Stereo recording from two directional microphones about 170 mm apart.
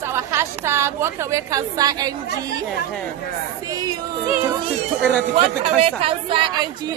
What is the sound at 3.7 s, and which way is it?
Speech, 25° right (ahead or behind).